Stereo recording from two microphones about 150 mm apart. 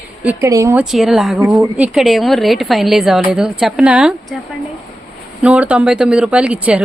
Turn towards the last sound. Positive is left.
turn(degrees=-10)  # may be behind; listen again after turning